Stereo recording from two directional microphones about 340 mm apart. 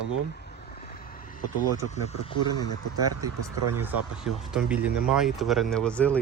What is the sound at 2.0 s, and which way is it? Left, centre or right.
Speech, centre.